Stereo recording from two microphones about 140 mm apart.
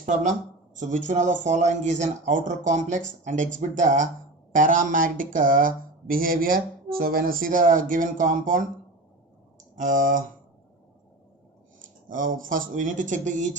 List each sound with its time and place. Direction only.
0.0 s speech: 60° right (ahead or behind)
9.7 s speech: 70° right (ahead or behind)
12.0 s speech: 75° right (ahead or behind)